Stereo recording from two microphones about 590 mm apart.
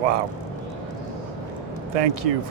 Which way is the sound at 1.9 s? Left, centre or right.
Right.